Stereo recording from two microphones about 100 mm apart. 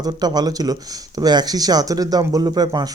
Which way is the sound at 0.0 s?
40° right (ahead or behind).